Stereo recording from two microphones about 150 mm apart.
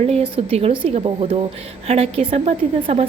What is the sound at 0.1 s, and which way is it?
A woman's voice, 40° right (ahead or behind).